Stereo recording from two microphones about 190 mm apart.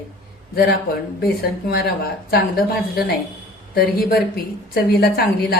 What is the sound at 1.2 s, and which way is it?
A woman's voice, 55° left (ahead or behind).